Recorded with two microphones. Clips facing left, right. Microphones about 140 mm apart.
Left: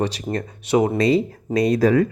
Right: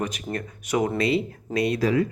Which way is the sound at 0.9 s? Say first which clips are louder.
Left 5 dB; 40° left (ahead or behind).